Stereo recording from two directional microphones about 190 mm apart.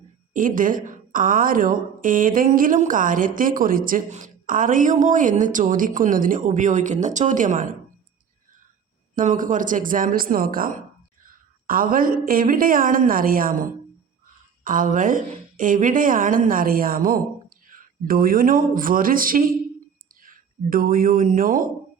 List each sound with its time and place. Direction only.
0.3 s a woman's voice: 45° right (ahead or behind)
9.1 s a woman's voice: 45° right (ahead or behind)